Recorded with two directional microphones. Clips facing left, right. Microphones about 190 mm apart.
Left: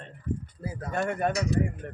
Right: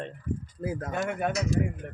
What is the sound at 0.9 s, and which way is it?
Speech, centre (ahead or behind).